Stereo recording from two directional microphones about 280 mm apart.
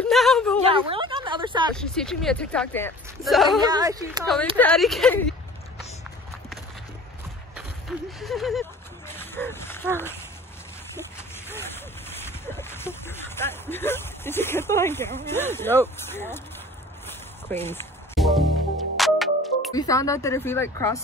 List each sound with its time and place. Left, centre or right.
0.0 s a sound: centre
0.7 s a sound: centre
1.8 s speech: centre
3.6 s speech: centre
4.6 s speech: centre
8.2 s a sound: centre
11.4 s speech: centre
17.5 s music: centre
19.7 s speech: centre